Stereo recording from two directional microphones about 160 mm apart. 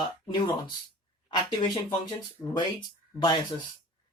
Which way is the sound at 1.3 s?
25° left (ahead or behind).